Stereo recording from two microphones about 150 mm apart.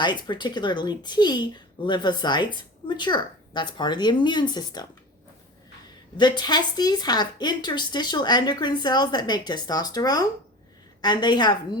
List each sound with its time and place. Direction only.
0.0 s a woman's voice: 30° left (ahead or behind)
6.1 s a woman's voice: 30° left (ahead or behind)